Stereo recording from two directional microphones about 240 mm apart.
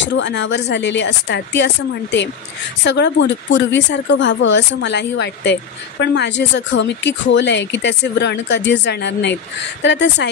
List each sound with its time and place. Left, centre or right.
0.0 s speech: left